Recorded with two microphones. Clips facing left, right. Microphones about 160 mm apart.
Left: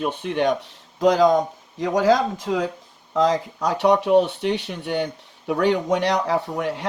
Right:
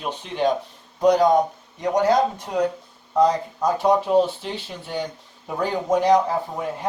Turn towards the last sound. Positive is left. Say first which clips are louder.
# left 3 dB
turn(degrees=80)